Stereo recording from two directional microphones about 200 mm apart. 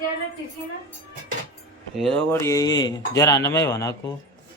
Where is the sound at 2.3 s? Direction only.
15° left (ahead or behind).